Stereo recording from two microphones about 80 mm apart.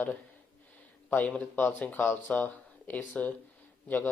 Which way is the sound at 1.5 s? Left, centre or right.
Left.